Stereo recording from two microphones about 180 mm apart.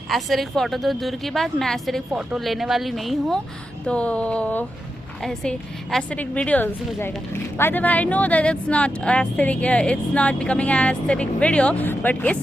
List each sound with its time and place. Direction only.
0.1 s a woman's voice: centre (ahead or behind)